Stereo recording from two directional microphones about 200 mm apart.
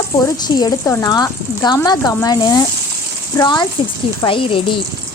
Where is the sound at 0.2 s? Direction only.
20° left (ahead or behind).